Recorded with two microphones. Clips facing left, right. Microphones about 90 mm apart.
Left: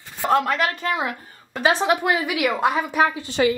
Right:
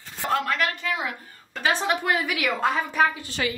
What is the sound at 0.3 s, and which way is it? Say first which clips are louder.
A woman's voice: left 5 dB; 25° left (ahead or behind).